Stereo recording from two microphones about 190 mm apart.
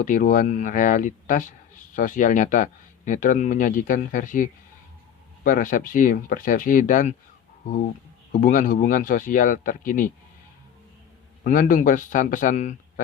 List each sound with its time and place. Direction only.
0.0 s a man's voice: 45° left (ahead or behind)
8.3 s a man's voice: 45° left (ahead or behind)
11.4 s a man's voice: 45° left (ahead or behind)